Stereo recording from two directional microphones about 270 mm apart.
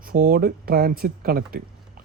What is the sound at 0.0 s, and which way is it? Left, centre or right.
Speech, right.